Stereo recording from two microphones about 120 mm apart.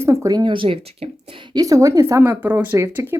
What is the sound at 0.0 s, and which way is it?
Speech, 25° right (ahead or behind).